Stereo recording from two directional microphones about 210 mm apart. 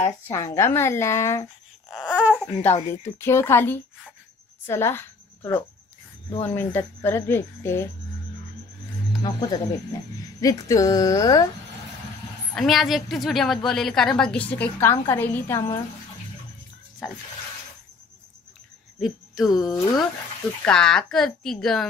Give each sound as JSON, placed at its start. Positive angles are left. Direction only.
{"t": 0.0, "sound": "a woman's voice", "side_deg": 15}
{"t": 1.9, "sound": "a sound", "side_deg": -5}
{"t": 2.4, "sound": "a woman's voice", "side_deg": 10}
{"t": 9.2, "sound": "a woman's voice", "side_deg": 20}
{"t": 12.5, "sound": "a woman's voice", "side_deg": 0}
{"t": 17.0, "sound": "a woman's voice", "side_deg": 0}
{"t": 18.9, "sound": "cricket", "side_deg": 0}
{"t": 19.8, "sound": "a woman's voice", "side_deg": 15}
{"t": 20.6, "sound": "a woman's voice", "side_deg": 5}